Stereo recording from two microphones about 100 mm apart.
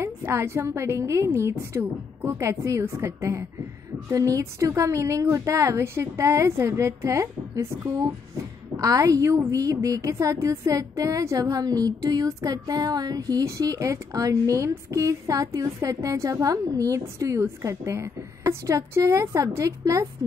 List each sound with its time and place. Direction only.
0.0 s a woman's voice: 25° right (ahead or behind)